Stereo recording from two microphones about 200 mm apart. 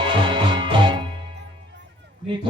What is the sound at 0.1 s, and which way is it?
Music, 25° right (ahead or behind).